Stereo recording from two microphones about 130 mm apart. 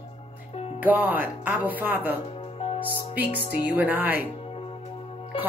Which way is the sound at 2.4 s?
45° left (ahead or behind).